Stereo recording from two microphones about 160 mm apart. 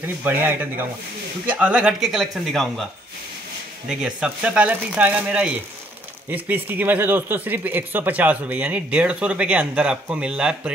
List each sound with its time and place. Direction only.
0.0 s speech: 10° right (ahead or behind)
3.9 s speech: 5° right (ahead or behind)